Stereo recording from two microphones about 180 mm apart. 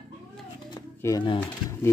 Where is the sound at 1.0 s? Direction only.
25° left (ahead or behind).